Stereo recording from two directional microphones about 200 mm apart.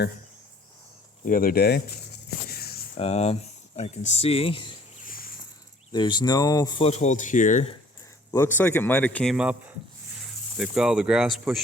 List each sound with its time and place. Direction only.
1.2 s speech: 45° left (ahead or behind)
2.5 s a sound: 50° left (ahead or behind)
3.0 s speech: 30° left (ahead or behind)
5.0 s a sound: 45° left (ahead or behind)
5.9 s speech: 20° left (ahead or behind); by 7.7 s 40° left (ahead or behind)
8.3 s speech: 10° left (ahead or behind)
9.3 s speech: 5° right (ahead or behind)